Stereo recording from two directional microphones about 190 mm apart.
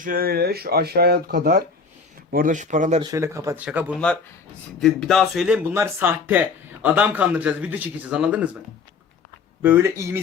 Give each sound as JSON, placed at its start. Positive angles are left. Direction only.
{"t": 0.0, "sound": "speech", "side_deg": -50}
{"t": 2.3, "sound": "speech", "side_deg": -45}
{"t": 3.0, "sound": "a man's voice", "side_deg": -15}
{"t": 9.6, "sound": "a man's voice", "side_deg": -10}